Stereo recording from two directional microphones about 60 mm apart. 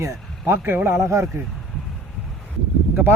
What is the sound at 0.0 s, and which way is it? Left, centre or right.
Speech, right.